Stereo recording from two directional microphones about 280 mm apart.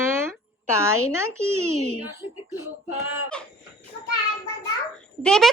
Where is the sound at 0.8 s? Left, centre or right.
Centre.